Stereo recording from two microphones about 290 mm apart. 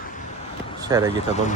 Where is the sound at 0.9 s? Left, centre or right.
Centre.